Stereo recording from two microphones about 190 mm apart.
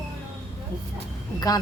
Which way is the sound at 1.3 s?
20° left (ahead or behind).